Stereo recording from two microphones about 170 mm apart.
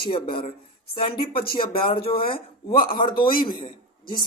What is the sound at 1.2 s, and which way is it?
Speech, 30° left (ahead or behind).